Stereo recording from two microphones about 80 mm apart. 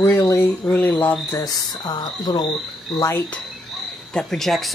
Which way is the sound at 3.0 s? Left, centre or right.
Left.